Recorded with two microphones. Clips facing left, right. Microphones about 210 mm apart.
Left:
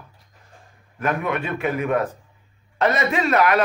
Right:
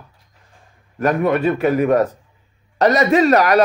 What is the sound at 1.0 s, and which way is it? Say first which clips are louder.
Speech: right 8 dB; 40° right (ahead or behind).